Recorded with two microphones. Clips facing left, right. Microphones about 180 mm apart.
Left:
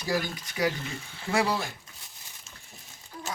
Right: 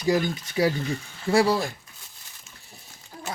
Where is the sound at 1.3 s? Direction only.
35° right (ahead or behind).